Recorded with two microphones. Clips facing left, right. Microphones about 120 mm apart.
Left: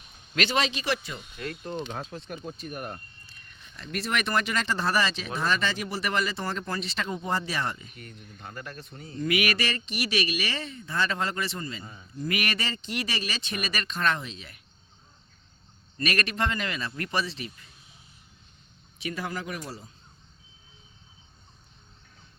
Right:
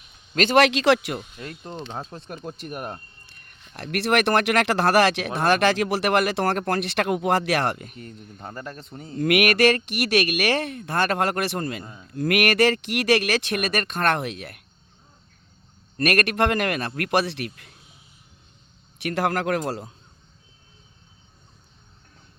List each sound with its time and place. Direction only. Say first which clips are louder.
0.5 s speech: right 13 dB; 80° right
1.4 s speech: left 2 dB; 20° right (ahead or behind)
1.9 s speech: right 2 dB; 35° right (ahead or behind)
2.4 s speech: right 3 dB; 70° right (ahead or behind)
3.8 s speech: right 8 dB; 70° right (ahead or behind)
7.9 s speech: right 6 dB; 35° right (ahead or behind)
9.1 s speech: right 7 dB; 65° right (ahead or behind)
12.1 s speech: right 10 dB; 75° right (ahead or behind)
16.0 s speech: right 7 dB; 60° right (ahead or behind)
18.9 s speech: right 9 dB; 75° right (ahead or behind); by 19.9 s 90° right